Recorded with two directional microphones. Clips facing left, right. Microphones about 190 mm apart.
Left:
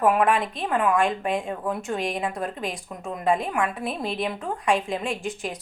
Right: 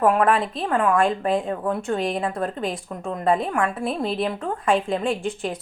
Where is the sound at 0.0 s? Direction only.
5° left (ahead or behind).